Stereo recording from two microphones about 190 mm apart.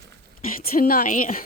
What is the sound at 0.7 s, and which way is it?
Speech, 50° left (ahead or behind).